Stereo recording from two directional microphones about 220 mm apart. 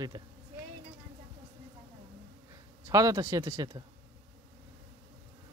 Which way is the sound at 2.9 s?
15° right (ahead or behind).